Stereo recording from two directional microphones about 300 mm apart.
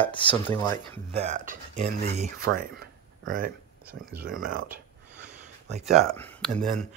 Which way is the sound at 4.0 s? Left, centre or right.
Centre.